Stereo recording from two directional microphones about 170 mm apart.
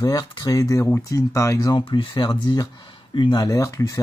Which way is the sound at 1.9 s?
30° left (ahead or behind).